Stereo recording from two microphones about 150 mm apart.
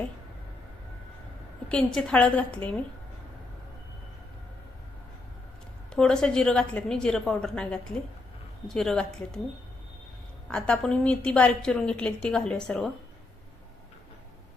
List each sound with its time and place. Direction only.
1.7 s a woman's voice: 5° left (ahead or behind)
5.9 s a woman's voice: 5° left (ahead or behind)
10.5 s a woman's voice: 5° left (ahead or behind)